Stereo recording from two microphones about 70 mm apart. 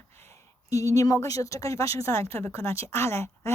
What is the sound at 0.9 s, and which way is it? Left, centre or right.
A woman's voice, left.